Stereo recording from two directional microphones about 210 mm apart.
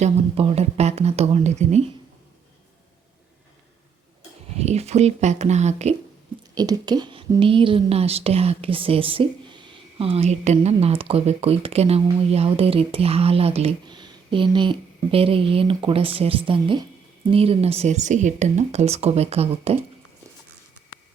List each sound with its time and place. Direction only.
0.0 s a woman's voice: 30° right (ahead or behind)
4.5 s a woman's voice: 30° right (ahead or behind)
6.5 s a woman's voice: 20° right (ahead or behind)